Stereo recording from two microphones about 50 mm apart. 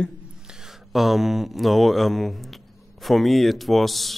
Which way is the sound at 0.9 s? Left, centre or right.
Centre.